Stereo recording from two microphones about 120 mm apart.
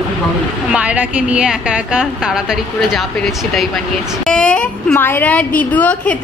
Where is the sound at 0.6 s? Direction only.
10° right (ahead or behind).